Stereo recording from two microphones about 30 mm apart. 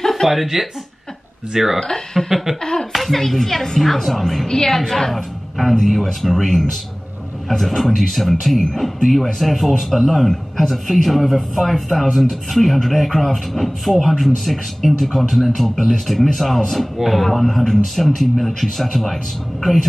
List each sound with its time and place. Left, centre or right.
0.1 s speech: centre
1.8 s speech: centre
2.2 s a sound: centre
2.6 s laughter: left
2.9 s speech: centre
5.1 s speech: centre